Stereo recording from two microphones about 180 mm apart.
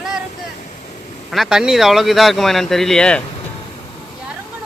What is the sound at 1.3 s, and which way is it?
Speech, centre (ahead or behind).